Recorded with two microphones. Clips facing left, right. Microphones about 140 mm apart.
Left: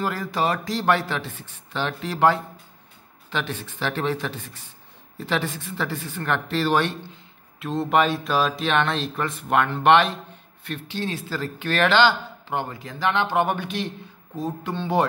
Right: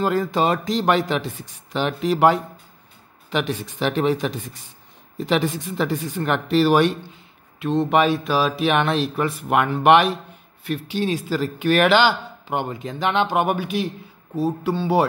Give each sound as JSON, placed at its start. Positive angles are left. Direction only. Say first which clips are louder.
{"t": 0.0, "sound": "speech", "louder": "right 5 dB", "side_deg": -25}
{"t": 7.5, "sound": "speech", "louder": "right 3 dB", "side_deg": 0}